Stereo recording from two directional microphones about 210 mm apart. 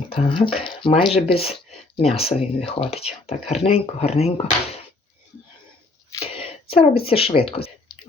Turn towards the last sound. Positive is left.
turn(degrees=25)  # may be behind; listen again after turning